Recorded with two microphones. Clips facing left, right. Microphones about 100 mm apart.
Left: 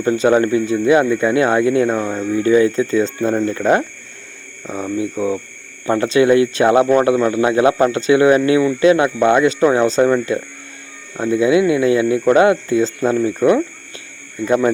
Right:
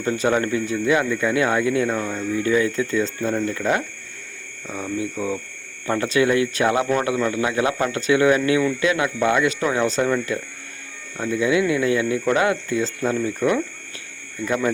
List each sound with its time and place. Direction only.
0.0 s speech: 25° left (ahead or behind)